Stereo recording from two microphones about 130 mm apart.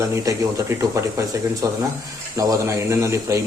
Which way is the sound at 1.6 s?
25° right (ahead or behind).